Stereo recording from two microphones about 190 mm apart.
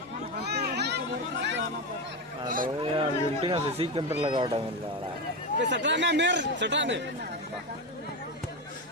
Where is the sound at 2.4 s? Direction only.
45° right (ahead or behind).